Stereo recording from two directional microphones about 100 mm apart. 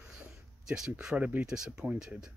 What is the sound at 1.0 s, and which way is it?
Speech, 10° right (ahead or behind).